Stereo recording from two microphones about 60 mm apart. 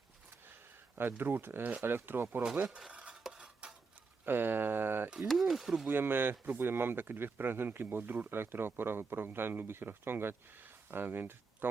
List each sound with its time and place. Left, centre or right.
0.9 s speech: right
2.6 s stir: centre
2.9 s stir: right
4.3 s speech: right
5.3 s speech: centre
5.8 s speech: right